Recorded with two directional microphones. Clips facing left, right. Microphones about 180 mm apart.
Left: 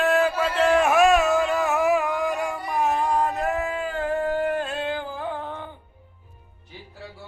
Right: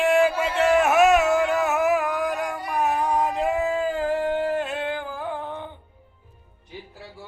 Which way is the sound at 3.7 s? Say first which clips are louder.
Right 2 dB; 30° right (ahead or behind).